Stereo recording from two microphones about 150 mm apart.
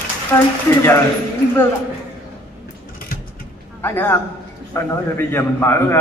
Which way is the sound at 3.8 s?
15° left (ahead or behind).